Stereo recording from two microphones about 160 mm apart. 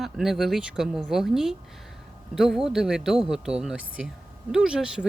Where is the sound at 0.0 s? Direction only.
Centre (ahead or behind).